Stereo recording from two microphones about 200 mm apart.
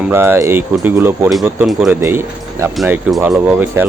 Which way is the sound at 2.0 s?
15° right (ahead or behind).